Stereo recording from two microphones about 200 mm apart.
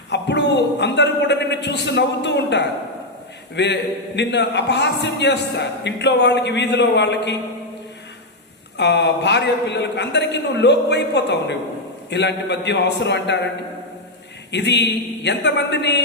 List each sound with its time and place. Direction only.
0.1 s a man's voice: 60° left (ahead or behind)
8.8 s a man's voice: 60° left (ahead or behind)
14.5 s a man's voice: 60° left (ahead or behind)